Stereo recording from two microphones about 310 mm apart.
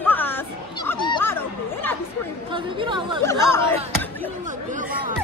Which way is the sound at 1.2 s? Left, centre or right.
Centre.